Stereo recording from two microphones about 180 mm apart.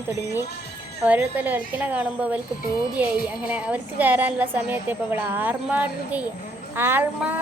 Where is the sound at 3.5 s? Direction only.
10° right (ahead or behind).